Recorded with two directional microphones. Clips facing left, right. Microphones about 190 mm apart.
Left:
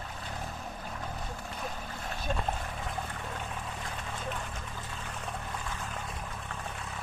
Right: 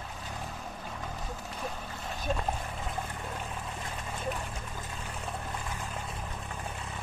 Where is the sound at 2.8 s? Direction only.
10° right (ahead or behind).